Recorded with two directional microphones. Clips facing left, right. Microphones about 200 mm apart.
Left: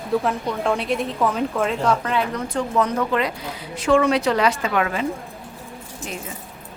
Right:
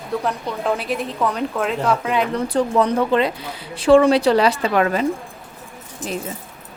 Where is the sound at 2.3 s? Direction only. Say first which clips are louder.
Right 4 dB; 35° right (ahead or behind).